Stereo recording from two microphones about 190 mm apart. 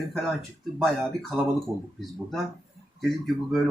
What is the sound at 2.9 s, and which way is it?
Speech, centre (ahead or behind).